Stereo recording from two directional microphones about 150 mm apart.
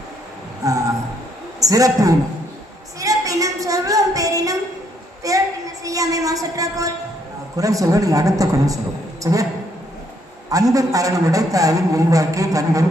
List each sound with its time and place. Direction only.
0.6 s a sound: 20° right (ahead or behind)
1.6 s a man's voice: 20° right (ahead or behind)
3.0 s music: 25° right (ahead or behind)
5.2 s a sound: 20° right (ahead or behind)
5.8 s a woman's voice: 25° right (ahead or behind)
10.5 s a man's voice: 25° right (ahead or behind)